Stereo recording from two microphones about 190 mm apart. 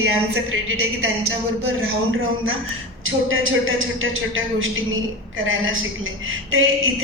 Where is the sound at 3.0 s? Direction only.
90° right.